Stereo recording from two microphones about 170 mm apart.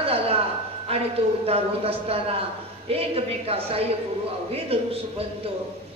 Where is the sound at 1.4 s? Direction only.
35° right (ahead or behind).